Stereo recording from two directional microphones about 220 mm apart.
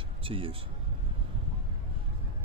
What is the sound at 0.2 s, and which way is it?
Speech, 25° right (ahead or behind).